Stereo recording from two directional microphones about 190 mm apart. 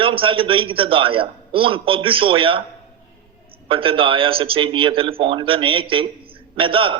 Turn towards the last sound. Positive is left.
turn(degrees=-30)  # may be behind; listen again after turning